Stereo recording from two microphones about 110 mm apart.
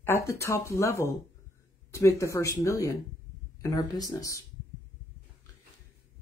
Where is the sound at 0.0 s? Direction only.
25° left (ahead or behind).